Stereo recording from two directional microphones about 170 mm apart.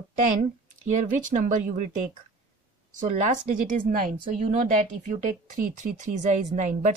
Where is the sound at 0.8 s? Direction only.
45° right (ahead or behind).